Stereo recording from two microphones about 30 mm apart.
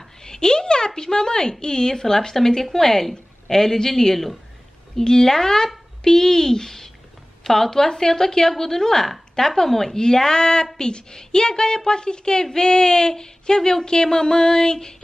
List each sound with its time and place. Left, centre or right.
0.2 s a woman's voice: left
4.9 s a woman's voice: centre